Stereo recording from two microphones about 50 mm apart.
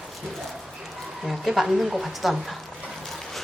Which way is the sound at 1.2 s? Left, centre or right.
Centre.